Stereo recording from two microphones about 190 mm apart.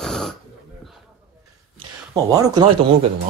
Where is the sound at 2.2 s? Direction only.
20° right (ahead or behind).